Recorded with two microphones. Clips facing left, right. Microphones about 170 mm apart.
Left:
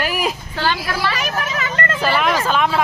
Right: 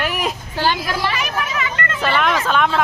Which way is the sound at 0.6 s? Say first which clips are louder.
Right 2 dB; 15° right (ahead or behind).